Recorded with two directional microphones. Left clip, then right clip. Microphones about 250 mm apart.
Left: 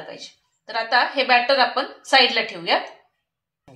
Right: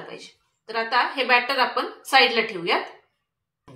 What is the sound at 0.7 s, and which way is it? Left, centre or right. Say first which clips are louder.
A woman's voice: left 2 dB; left.